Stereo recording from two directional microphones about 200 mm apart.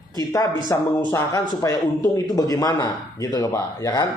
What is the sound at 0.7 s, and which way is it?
Speech, 15° left (ahead or behind).